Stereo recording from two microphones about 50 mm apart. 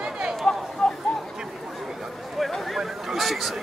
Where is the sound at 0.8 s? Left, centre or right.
Centre.